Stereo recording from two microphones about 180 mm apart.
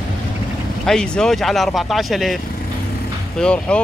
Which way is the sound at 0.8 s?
5° left (ahead or behind).